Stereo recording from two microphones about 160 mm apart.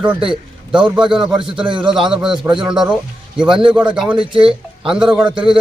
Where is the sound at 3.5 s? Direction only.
30° right (ahead or behind).